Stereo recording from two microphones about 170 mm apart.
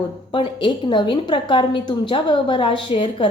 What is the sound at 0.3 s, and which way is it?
A woman's voice, 30° left (ahead or behind).